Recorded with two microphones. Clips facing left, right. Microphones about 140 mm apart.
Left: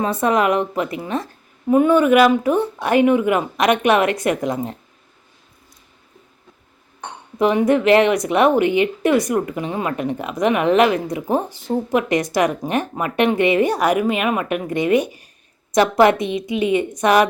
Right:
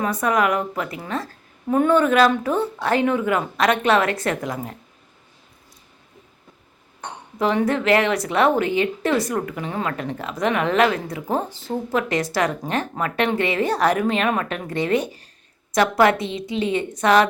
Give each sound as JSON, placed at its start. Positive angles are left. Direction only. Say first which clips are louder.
{"t": 0.0, "sound": "a woman's voice", "louder": "left 3 dB", "side_deg": 25}
{"t": 1.6, "sound": "a woman's voice", "louder": "left 3 dB", "side_deg": 10}
{"t": 7.3, "sound": "a woman's voice", "louder": "left 4 dB", "side_deg": 15}